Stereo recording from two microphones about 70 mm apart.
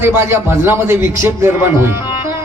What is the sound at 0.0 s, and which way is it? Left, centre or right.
A man's voice, right.